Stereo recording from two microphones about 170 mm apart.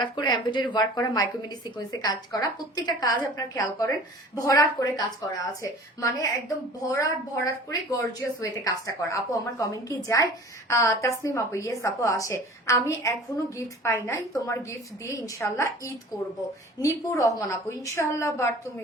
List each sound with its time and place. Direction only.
0.0 s a woman's voice: 25° left (ahead or behind)